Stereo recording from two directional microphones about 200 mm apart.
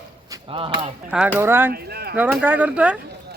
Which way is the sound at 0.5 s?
25° right (ahead or behind).